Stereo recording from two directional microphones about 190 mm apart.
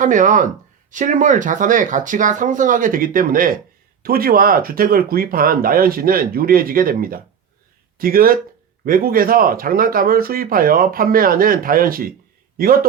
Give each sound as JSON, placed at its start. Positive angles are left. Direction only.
{"t": 0.0, "sound": "speech", "side_deg": -40}